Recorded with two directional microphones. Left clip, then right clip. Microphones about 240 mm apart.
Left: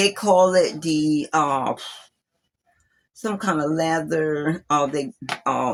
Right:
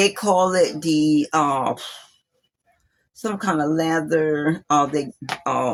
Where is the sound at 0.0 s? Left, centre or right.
Centre.